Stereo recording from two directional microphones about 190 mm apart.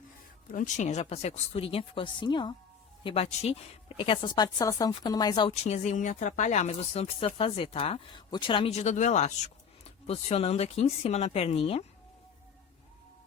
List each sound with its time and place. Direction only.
0.5 s speech: 40° left (ahead or behind)